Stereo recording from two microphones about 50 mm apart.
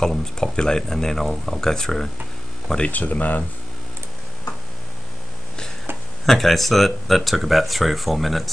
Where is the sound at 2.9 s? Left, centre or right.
Left.